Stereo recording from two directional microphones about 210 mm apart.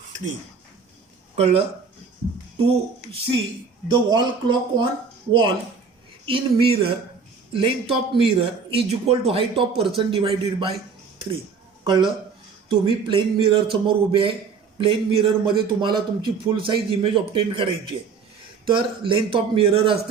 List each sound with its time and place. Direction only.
1.4 s speech: 30° right (ahead or behind)
6.2 s speech: 25° right (ahead or behind)
11.9 s speech: 20° right (ahead or behind)